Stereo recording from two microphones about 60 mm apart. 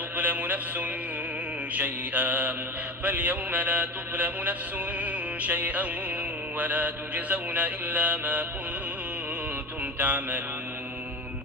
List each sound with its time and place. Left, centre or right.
0.2 s mantra: right
4.9 s music: right
6.6 s mantra: right
10.0 s mantra: right